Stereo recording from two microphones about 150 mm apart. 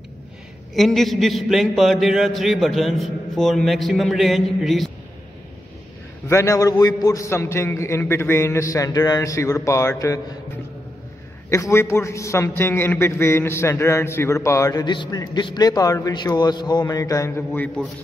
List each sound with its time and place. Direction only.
0.7 s a man's voice: centre (ahead or behind)
6.2 s a man's voice: 20° left (ahead or behind)
11.5 s a man's voice: 20° left (ahead or behind)